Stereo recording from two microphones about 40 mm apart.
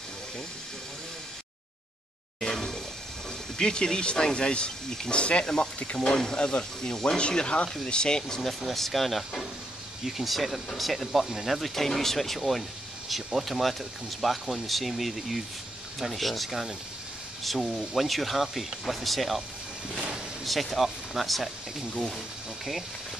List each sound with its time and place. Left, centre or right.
2.4 s a sound: centre
3.5 s speech: centre
8.5 s speech: centre
11.1 s speech: centre
11.7 s speech: centre
20.4 s speech: centre